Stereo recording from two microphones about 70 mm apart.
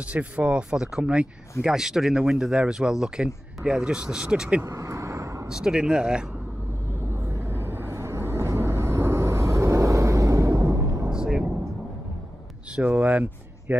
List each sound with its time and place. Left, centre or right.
0.1 s speech: centre
4.6 s vehicle: right
5.5 s speech: centre
7.5 s vehicle: right
11.1 s vehicle: centre
12.7 s speech: centre